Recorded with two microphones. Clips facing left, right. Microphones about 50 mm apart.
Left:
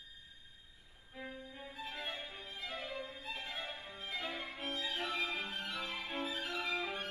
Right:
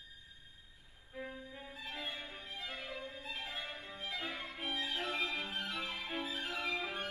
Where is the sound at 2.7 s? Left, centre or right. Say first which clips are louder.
Left 1 dB; left.